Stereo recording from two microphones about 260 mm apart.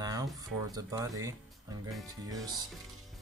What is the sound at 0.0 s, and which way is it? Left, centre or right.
Speech, centre.